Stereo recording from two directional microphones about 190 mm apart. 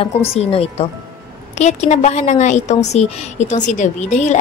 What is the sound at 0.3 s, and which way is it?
A woman's voice, 30° left (ahead or behind).